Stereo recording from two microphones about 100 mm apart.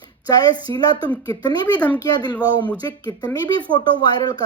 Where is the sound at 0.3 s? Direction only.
40° left (ahead or behind).